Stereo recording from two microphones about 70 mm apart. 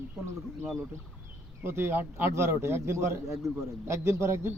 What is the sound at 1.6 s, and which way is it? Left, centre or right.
A man's voice, right.